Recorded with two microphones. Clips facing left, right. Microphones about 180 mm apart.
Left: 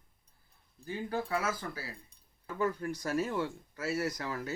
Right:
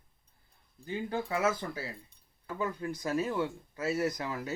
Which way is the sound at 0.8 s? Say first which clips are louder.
Right 1 dB; 20° right (ahead or behind).